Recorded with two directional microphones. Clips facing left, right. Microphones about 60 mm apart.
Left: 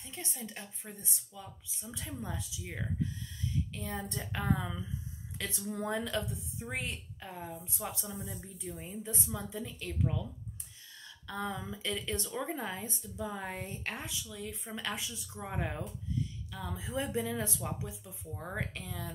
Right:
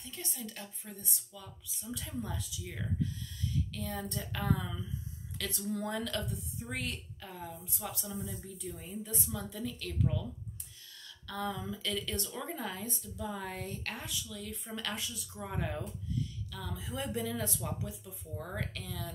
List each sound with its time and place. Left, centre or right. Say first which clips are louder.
0.0 s speech: even; left
11.2 s speech: right 1 dB; left